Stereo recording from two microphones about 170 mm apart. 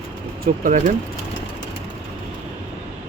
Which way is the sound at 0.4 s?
50° right (ahead or behind).